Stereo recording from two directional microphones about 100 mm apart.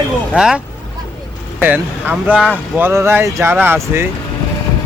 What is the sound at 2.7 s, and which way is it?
Speech, 25° right (ahead or behind).